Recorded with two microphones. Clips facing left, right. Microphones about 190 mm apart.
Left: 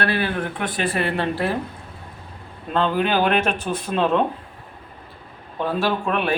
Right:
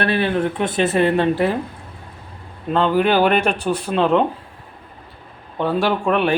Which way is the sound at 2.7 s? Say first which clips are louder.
Right 4 dB; 10° right (ahead or behind).